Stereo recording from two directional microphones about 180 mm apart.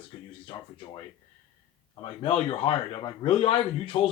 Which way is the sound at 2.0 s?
30° left (ahead or behind).